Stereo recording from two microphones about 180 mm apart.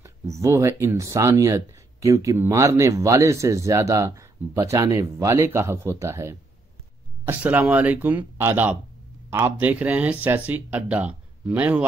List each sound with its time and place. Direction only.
0.0 s speech: 15° right (ahead or behind)